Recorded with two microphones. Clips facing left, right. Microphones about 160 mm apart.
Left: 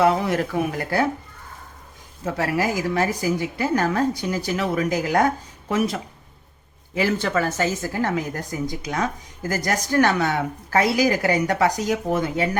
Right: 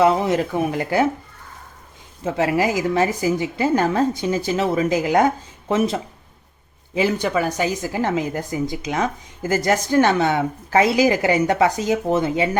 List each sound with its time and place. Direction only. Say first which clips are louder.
0.0 s speech: right 2 dB; 20° right (ahead or behind)
2.2 s speech: right 4 dB; 20° right (ahead or behind)